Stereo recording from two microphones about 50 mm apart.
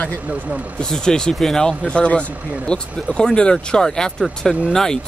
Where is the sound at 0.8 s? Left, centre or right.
Centre.